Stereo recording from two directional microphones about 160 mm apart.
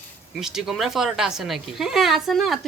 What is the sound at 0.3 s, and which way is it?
A woman's voice, 5° right (ahead or behind).